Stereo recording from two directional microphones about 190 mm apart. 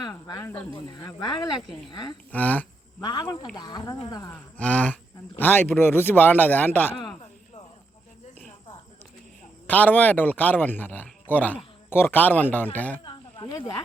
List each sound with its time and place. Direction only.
0.0 s speech: 20° left (ahead or behind)
0.7 s speech: 25° left (ahead or behind)
2.3 s speech: 10° left (ahead or behind)
3.0 s speech: 20° left (ahead or behind)
4.4 s speech: 5° left (ahead or behind)
9.6 s speech: 10° left (ahead or behind)
13.1 s snake: 25° left (ahead or behind)